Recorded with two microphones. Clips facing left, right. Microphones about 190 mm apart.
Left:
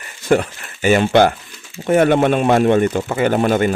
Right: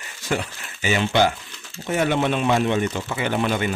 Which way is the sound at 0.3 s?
55° left (ahead or behind).